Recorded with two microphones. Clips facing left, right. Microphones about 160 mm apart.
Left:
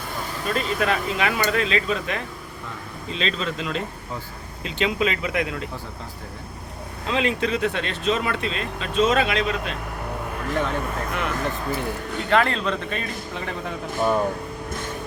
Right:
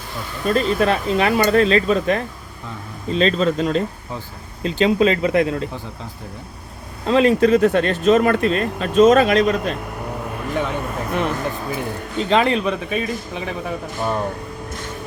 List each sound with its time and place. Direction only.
0.4 s speech: 35° right (ahead or behind)
7.1 s speech: 40° right (ahead or behind)
10.5 s a man's voice: 10° right (ahead or behind)